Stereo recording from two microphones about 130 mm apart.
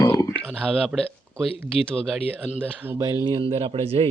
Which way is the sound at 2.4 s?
10° right (ahead or behind).